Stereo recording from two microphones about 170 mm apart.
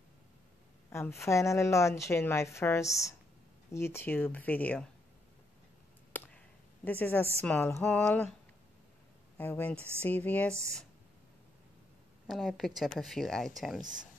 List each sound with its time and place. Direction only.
0.8 s a woman's voice: 15° left (ahead or behind)
6.1 s a sound: 10° left (ahead or behind)
7.4 s a woman's voice: 10° left (ahead or behind)
9.4 s a woman's voice: 10° left (ahead or behind)
12.3 s a woman's voice: centre (ahead or behind)